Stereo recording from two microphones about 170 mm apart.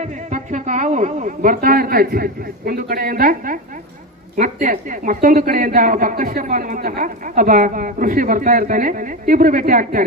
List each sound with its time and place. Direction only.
0.0 s a woman's voice: 45° right (ahead or behind)